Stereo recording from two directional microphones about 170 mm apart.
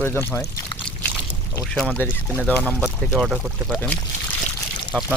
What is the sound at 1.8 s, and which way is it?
Speech, 5° left (ahead or behind).